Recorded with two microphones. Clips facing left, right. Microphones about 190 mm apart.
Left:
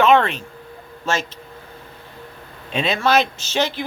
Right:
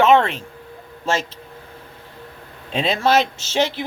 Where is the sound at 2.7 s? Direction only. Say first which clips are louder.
Right 1 dB; 30° right (ahead or behind).